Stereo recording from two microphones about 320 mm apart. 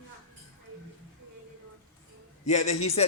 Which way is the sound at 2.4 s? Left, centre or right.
Left.